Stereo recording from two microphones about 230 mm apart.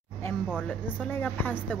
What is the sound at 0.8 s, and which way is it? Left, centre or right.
Speech, centre.